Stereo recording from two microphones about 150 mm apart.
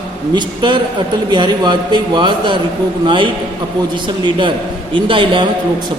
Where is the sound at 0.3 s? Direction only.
30° right (ahead or behind).